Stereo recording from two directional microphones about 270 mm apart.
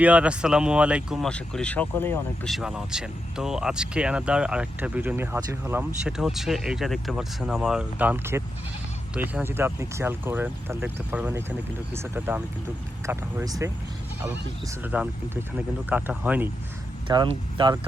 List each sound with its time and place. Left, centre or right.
0.0 s speech: centre